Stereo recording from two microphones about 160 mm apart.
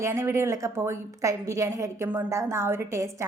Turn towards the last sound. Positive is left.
turn(degrees=-15)  # may be behind; listen again after turning